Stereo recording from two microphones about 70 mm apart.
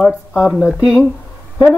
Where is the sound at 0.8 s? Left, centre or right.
Centre.